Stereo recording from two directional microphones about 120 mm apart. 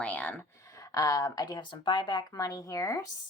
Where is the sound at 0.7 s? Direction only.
30° left (ahead or behind).